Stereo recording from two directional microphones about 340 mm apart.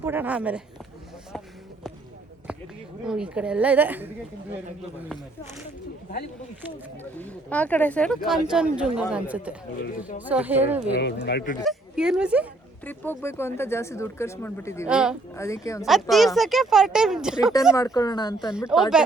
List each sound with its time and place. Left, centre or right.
0.0 s speech: centre
3.1 s speech: centre
7.2 s speech: centre
10.9 s speech: left
11.6 s speech: centre
14.8 s speech: centre
15.4 s speech: centre
17.7 s speech: centre
18.6 s speech: centre